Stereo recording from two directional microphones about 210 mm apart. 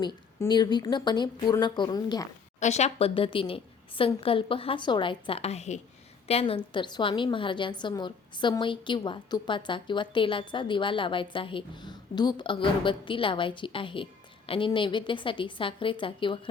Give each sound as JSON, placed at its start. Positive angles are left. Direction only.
{"t": 0.0, "sound": "a woman's voice", "side_deg": 20}
{"t": 2.6, "sound": "a woman's voice", "side_deg": 35}